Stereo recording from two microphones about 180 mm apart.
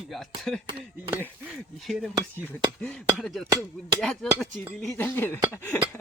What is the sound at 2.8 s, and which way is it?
Speech, 5° left (ahead or behind).